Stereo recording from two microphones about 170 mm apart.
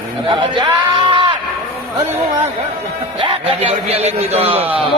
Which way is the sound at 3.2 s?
30° right (ahead or behind).